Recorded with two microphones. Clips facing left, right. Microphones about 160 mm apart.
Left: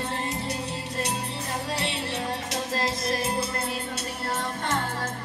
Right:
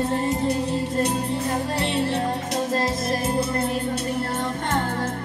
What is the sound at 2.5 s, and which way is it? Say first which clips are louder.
Music: right 5 dB; 50° right (ahead or behind).